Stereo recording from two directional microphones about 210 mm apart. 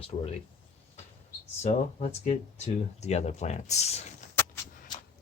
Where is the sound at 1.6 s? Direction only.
35° left (ahead or behind).